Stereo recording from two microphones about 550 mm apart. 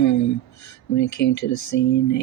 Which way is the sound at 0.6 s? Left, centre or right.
Left.